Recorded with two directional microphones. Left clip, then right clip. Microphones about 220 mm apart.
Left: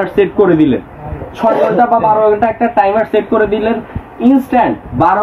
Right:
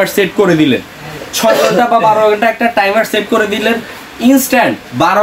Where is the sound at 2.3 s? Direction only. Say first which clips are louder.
Even; 30° right (ahead or behind).